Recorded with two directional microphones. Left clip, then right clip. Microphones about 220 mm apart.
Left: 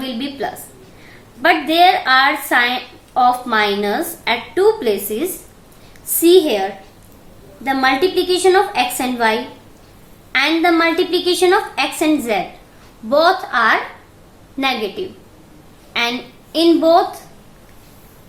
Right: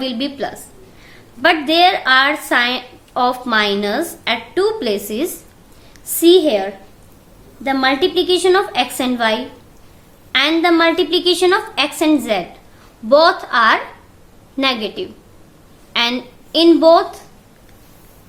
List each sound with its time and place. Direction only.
0.0 s a sound: 45° right (ahead or behind)
1.0 s a woman's voice: 50° right (ahead or behind)
6.1 s a woman's voice: 35° right (ahead or behind)
10.3 s a woman's voice: 35° right (ahead or behind)